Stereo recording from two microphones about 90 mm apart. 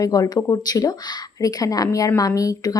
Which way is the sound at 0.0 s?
40° left (ahead or behind).